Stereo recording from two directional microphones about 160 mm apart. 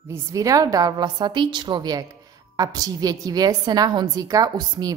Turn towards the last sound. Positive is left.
turn(degrees=-25)  # may be behind; listen again after turning